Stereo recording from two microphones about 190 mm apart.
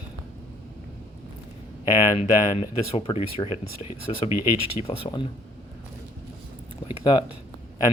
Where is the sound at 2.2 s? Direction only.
30° left (ahead or behind).